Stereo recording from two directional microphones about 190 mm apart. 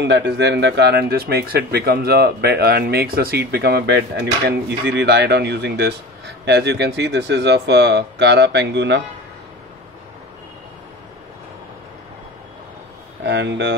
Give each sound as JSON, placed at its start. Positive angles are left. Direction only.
{"t": 0.0, "sound": "speech", "side_deg": -65}
{"t": 13.2, "sound": "speech", "side_deg": -65}